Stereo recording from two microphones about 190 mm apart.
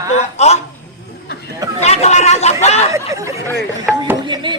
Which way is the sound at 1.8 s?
35° left (ahead or behind).